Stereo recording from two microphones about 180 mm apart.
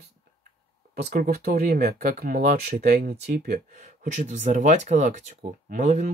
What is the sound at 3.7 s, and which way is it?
Speech, 40° right (ahead or behind).